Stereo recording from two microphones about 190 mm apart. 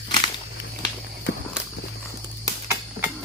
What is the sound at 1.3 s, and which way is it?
Walk, 60° left (ahead or behind).